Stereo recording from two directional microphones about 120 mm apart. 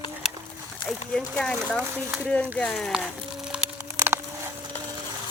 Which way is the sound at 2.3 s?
10° left (ahead or behind).